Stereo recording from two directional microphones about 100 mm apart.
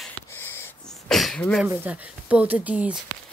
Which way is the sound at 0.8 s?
5° left (ahead or behind).